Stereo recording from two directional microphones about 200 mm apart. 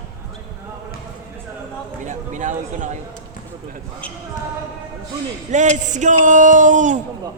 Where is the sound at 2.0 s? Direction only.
40° right (ahead or behind).